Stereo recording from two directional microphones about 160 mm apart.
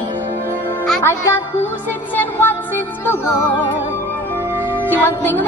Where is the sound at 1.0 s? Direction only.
15° left (ahead or behind).